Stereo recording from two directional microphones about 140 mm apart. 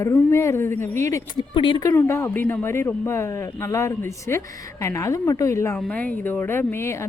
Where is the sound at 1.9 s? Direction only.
20° left (ahead or behind).